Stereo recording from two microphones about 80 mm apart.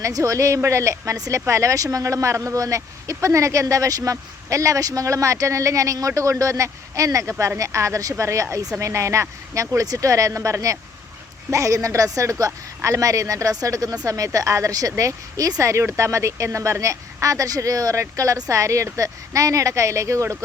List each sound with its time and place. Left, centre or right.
0.0 s speech: right